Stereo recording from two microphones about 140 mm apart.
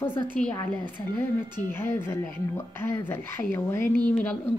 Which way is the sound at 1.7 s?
15° left (ahead or behind).